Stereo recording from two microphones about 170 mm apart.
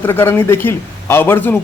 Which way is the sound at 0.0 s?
15° left (ahead or behind).